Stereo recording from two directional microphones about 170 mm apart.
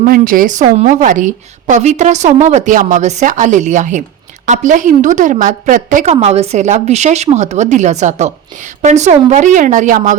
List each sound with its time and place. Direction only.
0.0 s a woman's voice: 55° right (ahead or behind)